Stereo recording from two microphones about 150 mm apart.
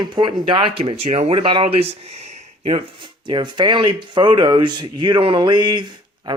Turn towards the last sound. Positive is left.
turn(degrees=-30)  # may be behind; listen again after turning